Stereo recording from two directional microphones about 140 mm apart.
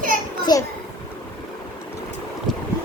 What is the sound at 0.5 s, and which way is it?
Speech, 30° left (ahead or behind).